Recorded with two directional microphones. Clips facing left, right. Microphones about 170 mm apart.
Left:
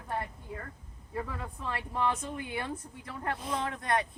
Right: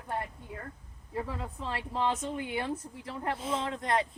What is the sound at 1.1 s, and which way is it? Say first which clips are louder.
Speech: right 1 dB; 25° right (ahead or behind).